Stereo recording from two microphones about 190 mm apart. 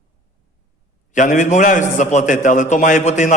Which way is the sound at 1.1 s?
40° left (ahead or behind).